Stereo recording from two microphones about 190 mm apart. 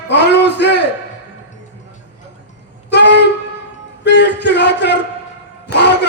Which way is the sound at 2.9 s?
65° left (ahead or behind).